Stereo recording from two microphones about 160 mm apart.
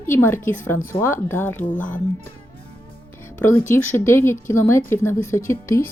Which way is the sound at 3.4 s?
15° left (ahead or behind).